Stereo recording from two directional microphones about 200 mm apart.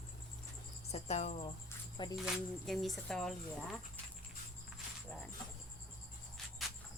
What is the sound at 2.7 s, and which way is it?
Speech, centre (ahead or behind).